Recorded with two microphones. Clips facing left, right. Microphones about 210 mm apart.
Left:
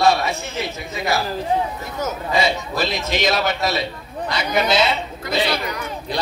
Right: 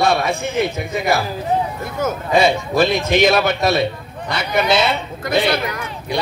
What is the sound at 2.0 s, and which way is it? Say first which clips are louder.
A man's voice: right 5 dB; 55° right (ahead or behind).